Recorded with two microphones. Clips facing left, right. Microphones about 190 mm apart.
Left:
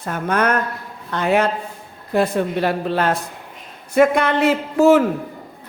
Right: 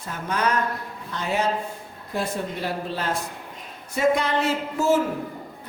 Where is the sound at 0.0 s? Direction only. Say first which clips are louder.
Left 6 dB; 55° left (ahead or behind).